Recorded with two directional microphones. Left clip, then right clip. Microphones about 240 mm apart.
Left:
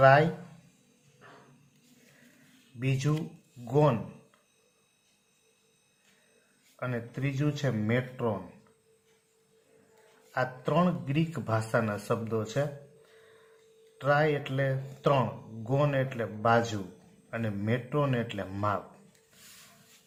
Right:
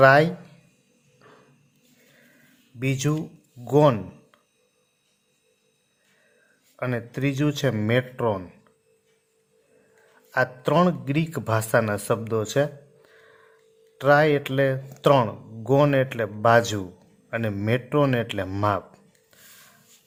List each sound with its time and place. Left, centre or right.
0.0 s speech: right
2.7 s speech: right
6.7 s speech: right
10.3 s speech: right
14.0 s speech: right